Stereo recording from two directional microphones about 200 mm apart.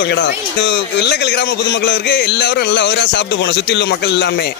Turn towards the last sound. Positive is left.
turn(degrees=55)  # may be behind; listen again after turning